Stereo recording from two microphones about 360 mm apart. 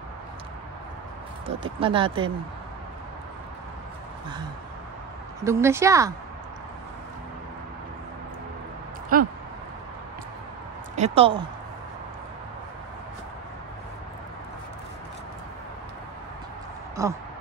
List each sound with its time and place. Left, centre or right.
1.6 s speech: centre
5.4 s speech: centre
9.1 s speech: right
11.0 s speech: centre
17.0 s speech: centre